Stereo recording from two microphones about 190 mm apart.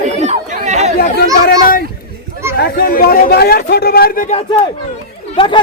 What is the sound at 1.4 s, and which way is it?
A child's voice, 50° left (ahead or behind).